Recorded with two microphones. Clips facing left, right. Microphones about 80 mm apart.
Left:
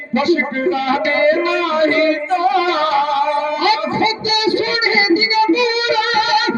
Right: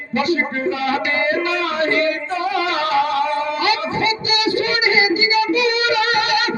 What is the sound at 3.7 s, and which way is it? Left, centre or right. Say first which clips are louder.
Speech: left 4 dB; left.